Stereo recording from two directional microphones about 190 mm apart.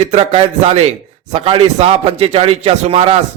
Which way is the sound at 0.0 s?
35° right (ahead or behind).